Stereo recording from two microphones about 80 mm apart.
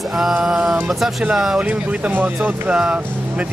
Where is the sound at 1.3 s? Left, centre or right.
Centre.